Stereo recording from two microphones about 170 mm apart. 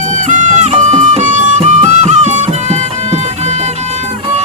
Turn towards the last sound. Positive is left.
turn(degrees=-40)  # may be behind; listen again after turning